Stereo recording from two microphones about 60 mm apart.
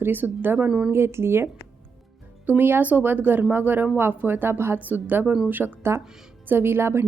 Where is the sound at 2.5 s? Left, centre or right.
Right.